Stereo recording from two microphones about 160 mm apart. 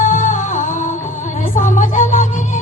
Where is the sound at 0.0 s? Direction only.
50° left (ahead or behind).